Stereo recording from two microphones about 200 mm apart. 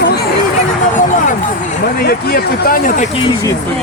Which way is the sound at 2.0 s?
50° left (ahead or behind).